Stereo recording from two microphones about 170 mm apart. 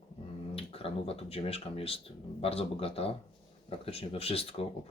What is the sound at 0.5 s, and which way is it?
Speech, 35° left (ahead or behind).